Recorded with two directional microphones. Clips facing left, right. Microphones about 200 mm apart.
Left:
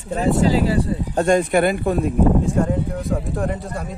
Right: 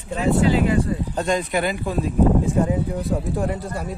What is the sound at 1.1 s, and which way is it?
Speech, 50° left (ahead or behind).